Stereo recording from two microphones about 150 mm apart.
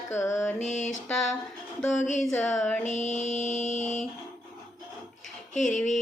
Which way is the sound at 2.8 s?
50° left (ahead or behind).